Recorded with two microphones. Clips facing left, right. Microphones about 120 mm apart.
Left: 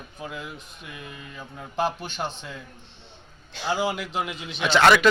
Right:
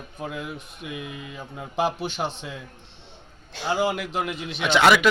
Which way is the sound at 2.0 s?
80° right.